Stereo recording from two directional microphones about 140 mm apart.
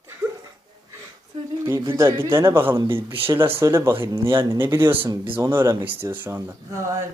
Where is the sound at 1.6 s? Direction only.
20° right (ahead or behind).